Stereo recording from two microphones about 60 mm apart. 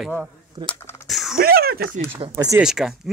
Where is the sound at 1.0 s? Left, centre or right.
Centre.